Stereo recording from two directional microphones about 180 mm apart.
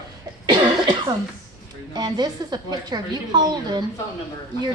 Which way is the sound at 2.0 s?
25° right (ahead or behind).